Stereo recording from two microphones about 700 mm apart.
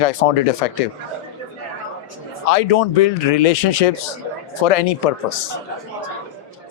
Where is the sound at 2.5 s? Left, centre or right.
Left.